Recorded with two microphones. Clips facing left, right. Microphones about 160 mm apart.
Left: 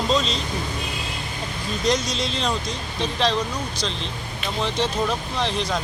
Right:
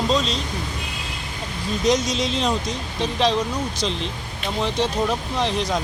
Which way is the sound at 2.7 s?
15° right (ahead or behind).